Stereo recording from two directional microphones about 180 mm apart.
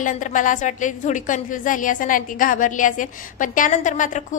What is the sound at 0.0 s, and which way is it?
A woman's voice, 45° left (ahead or behind).